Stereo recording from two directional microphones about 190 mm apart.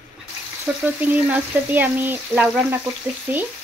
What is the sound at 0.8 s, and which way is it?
Frying, 10° right (ahead or behind).